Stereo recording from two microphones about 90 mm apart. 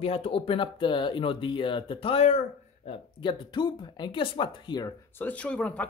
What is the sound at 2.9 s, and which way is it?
Speech, 60° left (ahead or behind).